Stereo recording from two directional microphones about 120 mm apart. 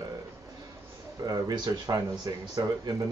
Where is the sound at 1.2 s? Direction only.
30° right (ahead or behind).